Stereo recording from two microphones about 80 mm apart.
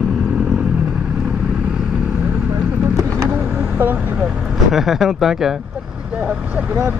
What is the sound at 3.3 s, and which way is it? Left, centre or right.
Vehicle, centre.